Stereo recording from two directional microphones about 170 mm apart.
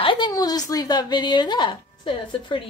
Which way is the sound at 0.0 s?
30° left (ahead or behind).